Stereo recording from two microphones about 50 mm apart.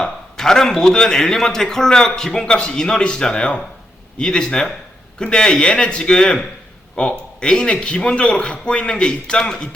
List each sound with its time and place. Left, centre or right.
0.0 s a man's voice: centre